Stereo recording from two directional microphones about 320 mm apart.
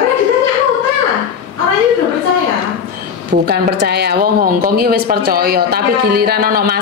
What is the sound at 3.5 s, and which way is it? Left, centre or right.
A woman's voice, right.